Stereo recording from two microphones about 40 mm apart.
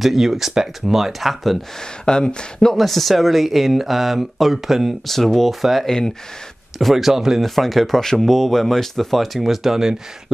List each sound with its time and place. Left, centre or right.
0.0 s speech: centre
2.0 s speech: centre
2.7 s speech: centre
5.0 s speech: centre
5.9 s speech: centre
6.8 s speech: centre
7.4 s speech: centre